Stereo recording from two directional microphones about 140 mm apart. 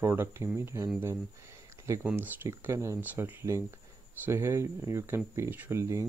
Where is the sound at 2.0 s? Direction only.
15° right (ahead or behind).